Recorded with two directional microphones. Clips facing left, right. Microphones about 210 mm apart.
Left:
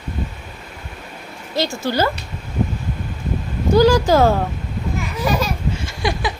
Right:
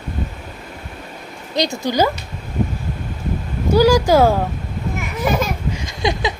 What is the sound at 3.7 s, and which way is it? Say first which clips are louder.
Speech: even; 10° right (ahead or behind).